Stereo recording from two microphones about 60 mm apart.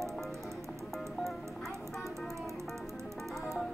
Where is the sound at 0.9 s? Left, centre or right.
Centre.